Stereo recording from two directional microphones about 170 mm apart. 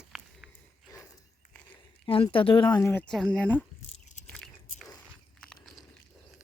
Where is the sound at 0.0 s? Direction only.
Centre (ahead or behind).